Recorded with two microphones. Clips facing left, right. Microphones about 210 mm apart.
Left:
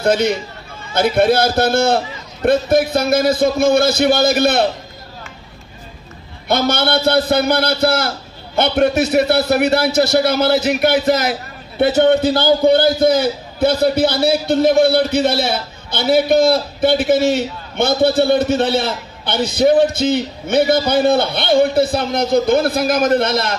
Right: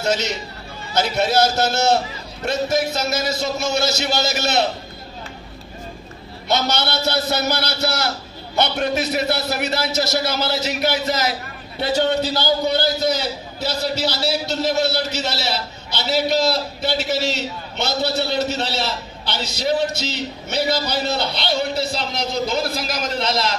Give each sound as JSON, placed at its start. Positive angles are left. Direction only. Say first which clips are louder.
{"t": 0.0, "sound": "a man's voice", "louder": "left 7 dB", "side_deg": 55}
{"t": 6.5, "sound": "a man's voice", "louder": "left 5 dB", "side_deg": 55}